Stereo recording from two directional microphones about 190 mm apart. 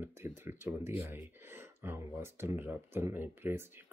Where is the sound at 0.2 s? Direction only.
15° right (ahead or behind).